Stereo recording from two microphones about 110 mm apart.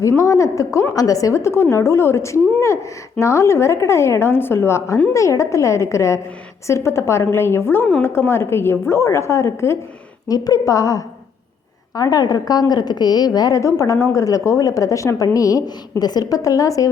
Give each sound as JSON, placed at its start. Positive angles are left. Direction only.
{"t": 0.2, "sound": "a woman's voice", "side_deg": 30}
{"t": 10.2, "sound": "a woman's voice", "side_deg": 35}